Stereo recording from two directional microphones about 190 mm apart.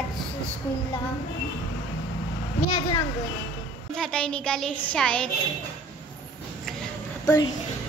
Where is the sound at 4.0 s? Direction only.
5° left (ahead or behind).